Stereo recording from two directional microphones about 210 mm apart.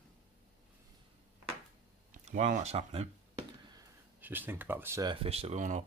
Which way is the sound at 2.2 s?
30° right (ahead or behind).